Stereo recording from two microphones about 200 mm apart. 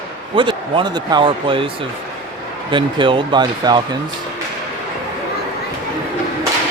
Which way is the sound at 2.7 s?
25° right (ahead or behind).